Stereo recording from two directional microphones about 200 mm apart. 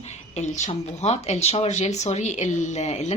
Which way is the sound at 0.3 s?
35° left (ahead or behind).